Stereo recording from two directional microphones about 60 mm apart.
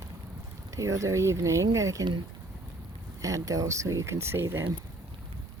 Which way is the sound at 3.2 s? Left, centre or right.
Right.